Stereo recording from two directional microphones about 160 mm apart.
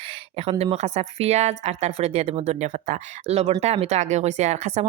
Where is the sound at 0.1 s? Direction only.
35° right (ahead or behind).